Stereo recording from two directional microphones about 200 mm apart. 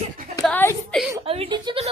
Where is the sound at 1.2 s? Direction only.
30° right (ahead or behind).